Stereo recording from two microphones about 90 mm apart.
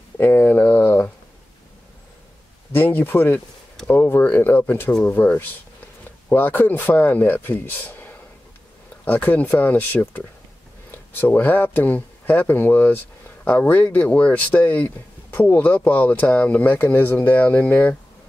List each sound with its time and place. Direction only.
0.2 s speech: 20° left (ahead or behind)
2.7 s speech: 25° left (ahead or behind)